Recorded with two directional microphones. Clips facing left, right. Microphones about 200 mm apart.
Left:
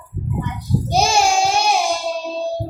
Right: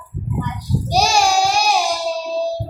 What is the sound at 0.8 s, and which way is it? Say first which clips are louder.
Child singing: even; 25° left (ahead or behind).